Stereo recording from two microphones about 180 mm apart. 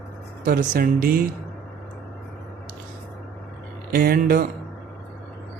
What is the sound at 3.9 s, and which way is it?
Speech, 55° right (ahead or behind).